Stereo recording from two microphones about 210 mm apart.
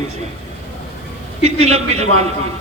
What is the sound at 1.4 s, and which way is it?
Speech, 30° right (ahead or behind).